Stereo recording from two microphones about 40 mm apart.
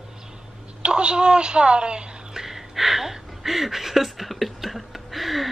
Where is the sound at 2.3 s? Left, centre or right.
Centre.